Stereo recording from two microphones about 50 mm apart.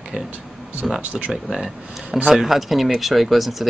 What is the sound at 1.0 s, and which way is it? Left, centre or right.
Speech, right.